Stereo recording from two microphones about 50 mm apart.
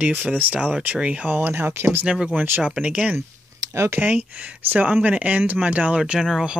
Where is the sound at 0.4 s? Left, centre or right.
Right.